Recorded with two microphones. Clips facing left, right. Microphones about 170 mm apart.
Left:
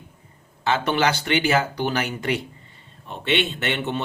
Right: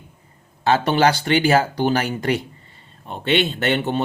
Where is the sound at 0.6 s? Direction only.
35° right (ahead or behind).